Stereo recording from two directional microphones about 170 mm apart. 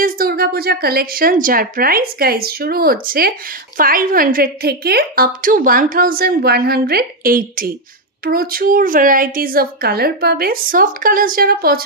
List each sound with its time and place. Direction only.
0.0 s a woman's voice: 60° right (ahead or behind)